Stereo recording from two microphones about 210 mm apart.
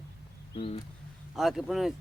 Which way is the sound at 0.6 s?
25° left (ahead or behind).